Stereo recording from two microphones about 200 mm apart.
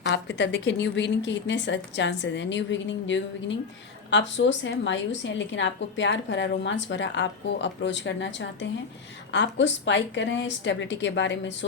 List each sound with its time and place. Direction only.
0.0 s a woman's voice: 60° left (ahead or behind)